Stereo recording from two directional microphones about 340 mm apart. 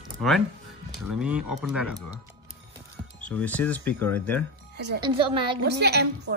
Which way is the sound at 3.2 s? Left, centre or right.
Centre.